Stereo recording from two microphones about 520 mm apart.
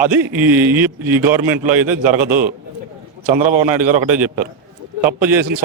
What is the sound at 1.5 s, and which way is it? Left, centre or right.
A man's voice, right.